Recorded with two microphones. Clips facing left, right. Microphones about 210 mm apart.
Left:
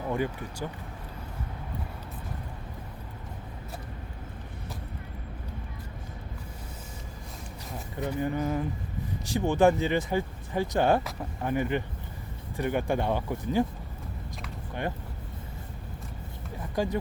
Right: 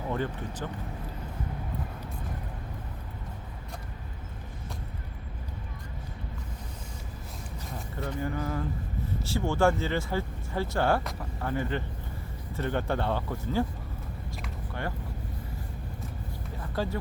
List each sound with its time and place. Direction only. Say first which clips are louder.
0.1 s speech: left 2 dB; 10° left (ahead or behind)
7.9 s speech: left 4 dB; 20° left (ahead or behind)
16.7 s speech: left 3 dB; 15° left (ahead or behind)